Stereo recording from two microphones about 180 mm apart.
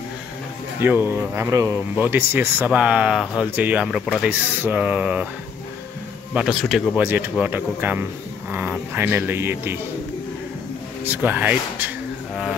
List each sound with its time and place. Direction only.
0.7 s speech: 10° right (ahead or behind)
6.3 s speech: centre (ahead or behind)
11.1 s speech: 10° right (ahead or behind)